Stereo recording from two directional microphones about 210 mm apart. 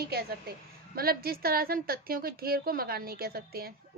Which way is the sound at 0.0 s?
50° right (ahead or behind).